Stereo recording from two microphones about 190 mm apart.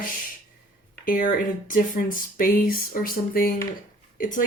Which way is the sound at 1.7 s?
45° left (ahead or behind).